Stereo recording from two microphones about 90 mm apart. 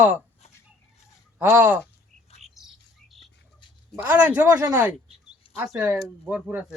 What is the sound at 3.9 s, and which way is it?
Speech, 15° right (ahead or behind).